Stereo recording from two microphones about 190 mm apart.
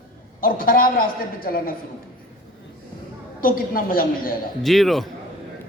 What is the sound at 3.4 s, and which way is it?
Speech, 50° left (ahead or behind).